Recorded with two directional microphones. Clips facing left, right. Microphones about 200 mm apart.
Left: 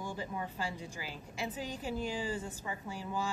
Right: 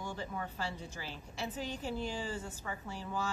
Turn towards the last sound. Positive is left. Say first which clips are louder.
# left 1 dB
turn(degrees=15)  # may be behind; listen again after turning